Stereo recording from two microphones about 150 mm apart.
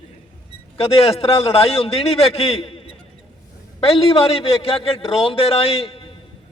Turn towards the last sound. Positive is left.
turn(degrees=40)  # may be behind; listen again after turning